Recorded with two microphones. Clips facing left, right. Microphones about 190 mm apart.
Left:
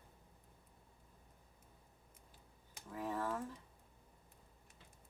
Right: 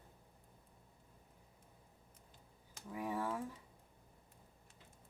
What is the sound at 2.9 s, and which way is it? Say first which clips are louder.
Speech: right 1 dB; 10° right (ahead or behind).